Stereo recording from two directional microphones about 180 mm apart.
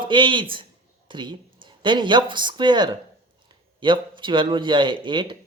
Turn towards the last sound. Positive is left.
turn(degrees=-25)  # may be behind; listen again after turning